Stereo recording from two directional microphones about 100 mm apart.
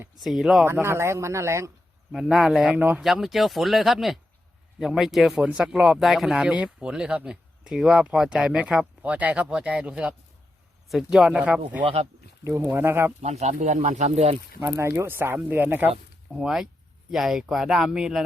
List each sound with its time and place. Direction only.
0.2 s speech: centre (ahead or behind)
0.6 s speech: 25° right (ahead or behind)
2.1 s speech: 5° right (ahead or behind)
3.0 s speech: centre (ahead or behind)
11.8 s speech: 70° right (ahead or behind)
12.5 s speech: 25° right (ahead or behind)
14.7 s speech: 25° right (ahead or behind)
15.9 s speech: 5° right (ahead or behind)